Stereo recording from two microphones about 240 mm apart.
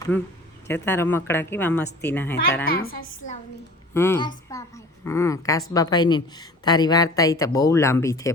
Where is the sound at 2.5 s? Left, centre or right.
Left.